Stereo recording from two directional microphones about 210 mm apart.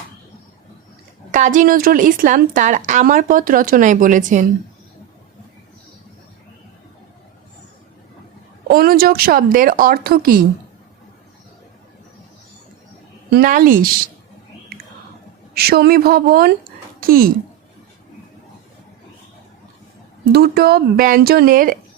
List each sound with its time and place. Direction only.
1.3 s a woman's voice: 35° right (ahead or behind)
8.6 s speech: 45° right (ahead or behind)
13.3 s a woman's voice: 40° right (ahead or behind)
14.7 s whispering: 45° right (ahead or behind)
15.5 s speech: 50° right (ahead or behind)
20.3 s speech: 50° right (ahead or behind)